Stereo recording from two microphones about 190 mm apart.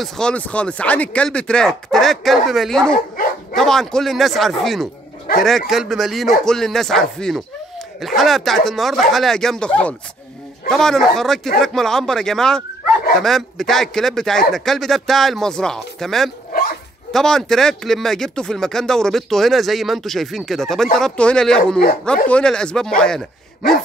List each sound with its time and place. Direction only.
0.0 s speech: 5° left (ahead or behind)
3.2 s dog: 45° left (ahead or behind)
3.5 s speech: centre (ahead or behind)
5.3 s speech: 50° left (ahead or behind)
5.7 s speech: centre (ahead or behind)